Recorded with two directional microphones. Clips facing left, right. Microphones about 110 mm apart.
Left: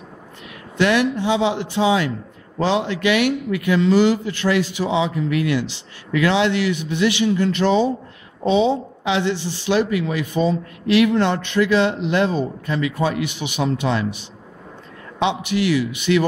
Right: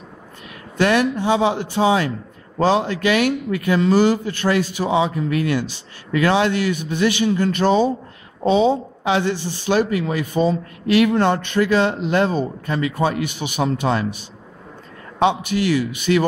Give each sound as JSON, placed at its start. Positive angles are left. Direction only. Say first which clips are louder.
{"t": 0.7, "sound": "speech", "louder": "even", "side_deg": -45}
{"t": 15.1, "sound": "speech", "louder": "right 2 dB", "side_deg": -45}